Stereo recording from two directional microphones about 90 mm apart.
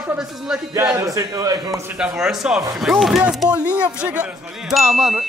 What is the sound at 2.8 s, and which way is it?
Ding, centre (ahead or behind).